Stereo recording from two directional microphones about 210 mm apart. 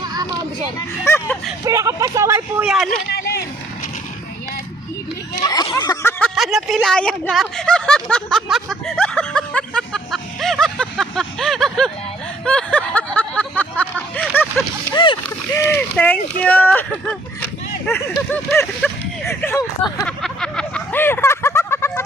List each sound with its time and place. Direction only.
0.0 s children playing: 20° right (ahead or behind)
0.8 s speech: 10° left (ahead or behind)
1.6 s speech: 15° right (ahead or behind)
5.4 s a sound: 20° left (ahead or behind)
14.9 s speech: 20° left (ahead or behind)
15.6 s speech: 5° left (ahead or behind)
20.2 s a sound: 5° left (ahead or behind)